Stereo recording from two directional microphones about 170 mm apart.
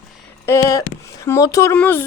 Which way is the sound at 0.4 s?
15° left (ahead or behind).